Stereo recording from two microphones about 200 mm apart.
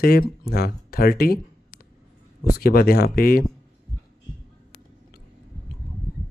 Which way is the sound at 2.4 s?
50° left (ahead or behind).